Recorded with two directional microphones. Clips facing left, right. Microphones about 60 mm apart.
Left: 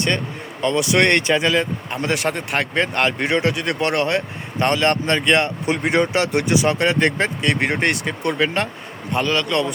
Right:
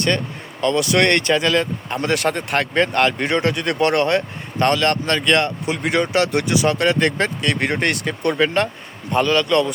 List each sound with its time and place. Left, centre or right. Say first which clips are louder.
0.6 s speech: even; centre
4.6 s speech: right 1 dB; centre
5.6 s a man's voice: left 1 dB; left; by 9.7 s centre